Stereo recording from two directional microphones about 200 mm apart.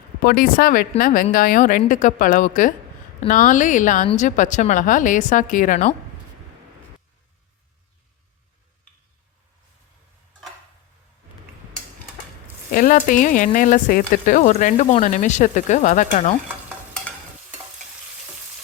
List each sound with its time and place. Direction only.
0.2 s speech: 45° left (ahead or behind)
12.7 s speech: 40° left (ahead or behind)